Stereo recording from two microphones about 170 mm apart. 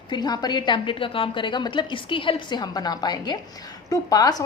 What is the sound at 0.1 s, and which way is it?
A woman's voice, 25° left (ahead or behind).